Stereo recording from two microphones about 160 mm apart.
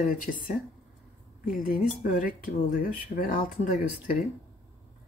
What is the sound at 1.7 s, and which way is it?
Speech, 55° left (ahead or behind).